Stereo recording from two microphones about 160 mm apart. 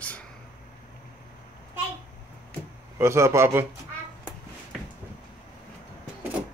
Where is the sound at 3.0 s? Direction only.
15° right (ahead or behind).